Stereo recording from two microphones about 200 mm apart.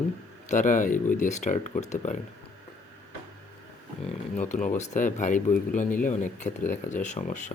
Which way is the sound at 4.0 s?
35° left (ahead or behind).